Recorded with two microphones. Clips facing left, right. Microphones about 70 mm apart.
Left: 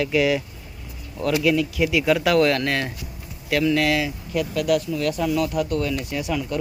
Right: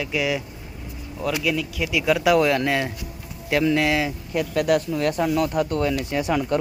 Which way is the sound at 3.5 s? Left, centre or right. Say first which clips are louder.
Even; right.